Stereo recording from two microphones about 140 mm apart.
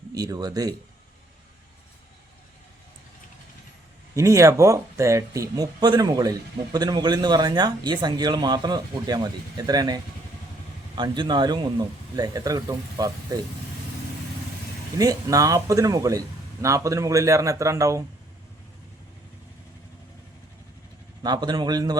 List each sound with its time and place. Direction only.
0.1 s speech: 25° right (ahead or behind)
4.1 s speech: 20° right (ahead or behind)
14.9 s speech: 25° right (ahead or behind)
21.2 s speech: 30° right (ahead or behind)